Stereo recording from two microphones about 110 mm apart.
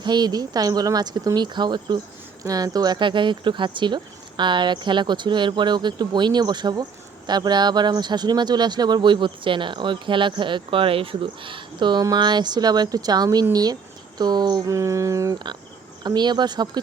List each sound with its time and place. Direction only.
0.0 s speech: 40° right (ahead or behind)
14.8 s speech: 25° right (ahead or behind)
16.0 s speech: 40° right (ahead or behind)